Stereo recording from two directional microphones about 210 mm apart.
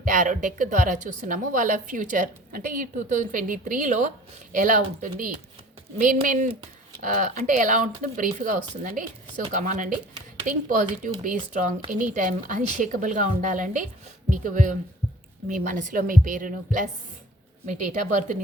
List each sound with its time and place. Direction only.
0.0 s a woman's voice: 40° right (ahead or behind)